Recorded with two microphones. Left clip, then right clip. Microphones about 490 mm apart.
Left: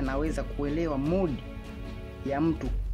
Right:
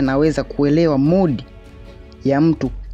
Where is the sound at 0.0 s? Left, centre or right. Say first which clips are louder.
Right 14 dB; left.